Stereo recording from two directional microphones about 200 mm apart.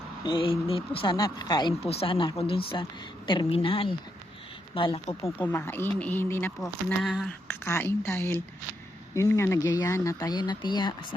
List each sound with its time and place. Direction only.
0.2 s speech: 25° left (ahead or behind); by 7.3 s centre (ahead or behind)
7.4 s speech: 10° left (ahead or behind)